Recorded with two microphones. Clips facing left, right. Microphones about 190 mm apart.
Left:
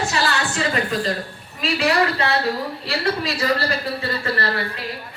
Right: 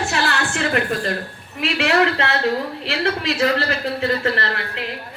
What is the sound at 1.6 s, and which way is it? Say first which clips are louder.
Speech: right 1 dB; 75° right (ahead or behind).